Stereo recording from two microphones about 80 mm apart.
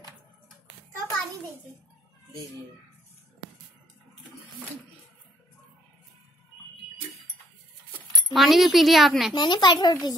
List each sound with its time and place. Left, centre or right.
8.3 s speech: centre
9.3 s speech: left